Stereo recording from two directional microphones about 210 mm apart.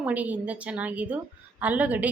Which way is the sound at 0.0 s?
5° right (ahead or behind).